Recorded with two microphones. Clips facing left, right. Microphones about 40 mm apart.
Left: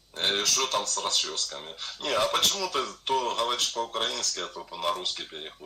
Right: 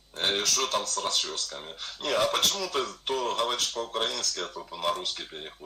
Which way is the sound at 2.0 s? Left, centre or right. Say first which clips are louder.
Even; left.